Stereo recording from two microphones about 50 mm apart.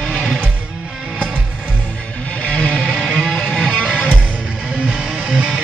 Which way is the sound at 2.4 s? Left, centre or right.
Left.